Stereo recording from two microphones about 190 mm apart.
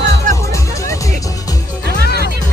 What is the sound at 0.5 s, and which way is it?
Music, 15° left (ahead or behind).